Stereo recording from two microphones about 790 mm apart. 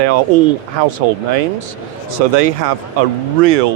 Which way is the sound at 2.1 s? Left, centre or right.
Right.